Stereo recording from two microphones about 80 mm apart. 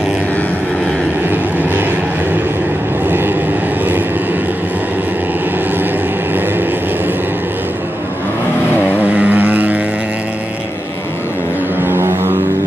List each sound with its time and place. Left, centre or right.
3.1 s vehicle: right
9.0 s vehicle: right
11.8 s a sound: right